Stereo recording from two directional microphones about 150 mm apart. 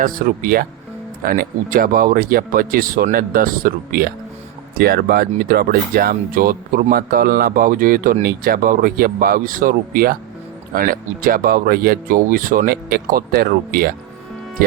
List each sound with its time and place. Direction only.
0.0 s speech: 65° right (ahead or behind)
4.8 s speech: 90° right